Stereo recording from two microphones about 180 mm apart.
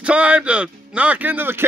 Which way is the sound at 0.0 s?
5° right (ahead or behind).